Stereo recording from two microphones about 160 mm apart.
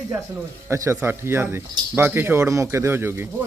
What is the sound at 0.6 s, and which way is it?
Speech, 15° right (ahead or behind).